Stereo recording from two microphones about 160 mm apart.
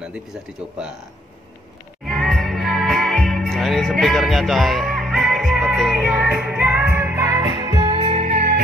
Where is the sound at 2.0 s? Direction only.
Centre (ahead or behind); by 7.8 s 25° right (ahead or behind).